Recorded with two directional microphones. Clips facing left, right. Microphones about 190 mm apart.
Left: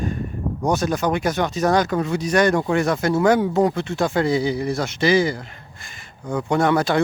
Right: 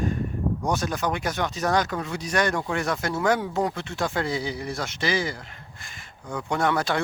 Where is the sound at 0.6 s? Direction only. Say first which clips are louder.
Left 8 dB; 40° left (ahead or behind).